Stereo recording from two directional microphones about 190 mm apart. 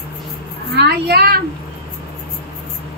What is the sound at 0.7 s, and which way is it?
Speech, 55° right (ahead or behind).